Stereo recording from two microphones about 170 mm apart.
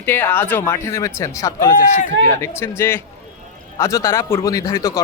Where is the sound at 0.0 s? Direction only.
10° left (ahead or behind).